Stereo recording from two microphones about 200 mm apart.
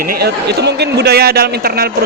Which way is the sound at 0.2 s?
55° right (ahead or behind).